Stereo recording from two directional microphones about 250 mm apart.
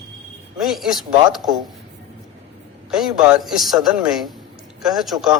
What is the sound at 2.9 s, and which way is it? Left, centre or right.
A man's voice, centre.